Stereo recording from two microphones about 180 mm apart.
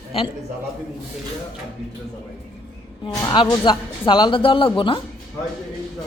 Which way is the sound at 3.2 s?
20° left (ahead or behind).